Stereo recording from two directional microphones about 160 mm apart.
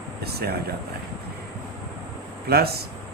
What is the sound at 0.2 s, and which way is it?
Speech, 80° right.